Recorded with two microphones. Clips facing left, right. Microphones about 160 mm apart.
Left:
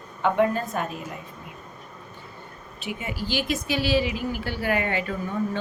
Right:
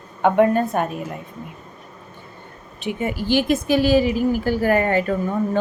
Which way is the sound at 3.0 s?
50° right (ahead or behind).